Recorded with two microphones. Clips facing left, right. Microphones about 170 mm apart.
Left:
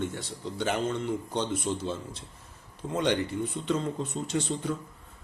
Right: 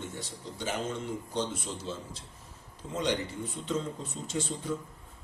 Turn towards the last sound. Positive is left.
turn(degrees=65)  # may be behind; listen again after turning